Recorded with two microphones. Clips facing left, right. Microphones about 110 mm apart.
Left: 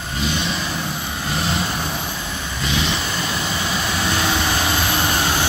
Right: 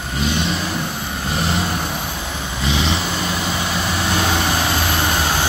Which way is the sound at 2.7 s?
25° right (ahead or behind).